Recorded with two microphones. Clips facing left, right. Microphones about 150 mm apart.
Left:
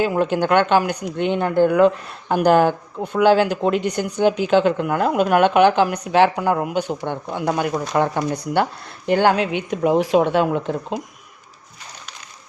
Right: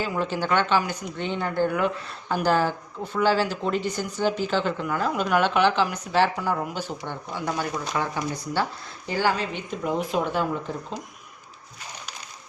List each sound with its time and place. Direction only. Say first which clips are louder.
0.0 s a woman's voice: left 8 dB; 55° left (ahead or behind); by 1.8 s 75° left (ahead or behind)
2.3 s a woman's voice: left 7 dB; 60° left (ahead or behind); by 11.0 s 75° left (ahead or behind)